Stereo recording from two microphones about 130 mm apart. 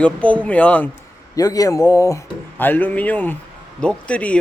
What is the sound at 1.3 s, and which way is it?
Speech, 25° left (ahead or behind).